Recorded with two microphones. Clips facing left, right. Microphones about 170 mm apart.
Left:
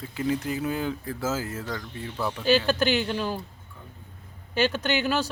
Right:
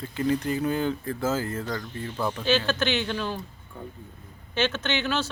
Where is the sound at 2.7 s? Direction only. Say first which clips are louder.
Left 2 dB; 35° left (ahead or behind).